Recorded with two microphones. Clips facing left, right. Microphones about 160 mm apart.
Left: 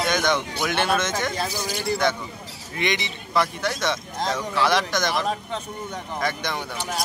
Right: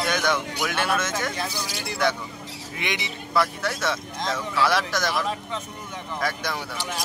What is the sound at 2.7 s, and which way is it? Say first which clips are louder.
Speech: left 5 dB; 5° right (ahead or behind).